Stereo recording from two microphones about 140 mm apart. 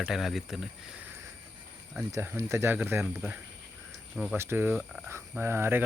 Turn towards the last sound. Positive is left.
turn(degrees=-15)  # may be behind; listen again after turning